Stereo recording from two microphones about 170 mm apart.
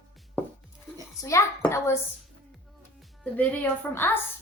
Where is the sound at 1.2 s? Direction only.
15° left (ahead or behind).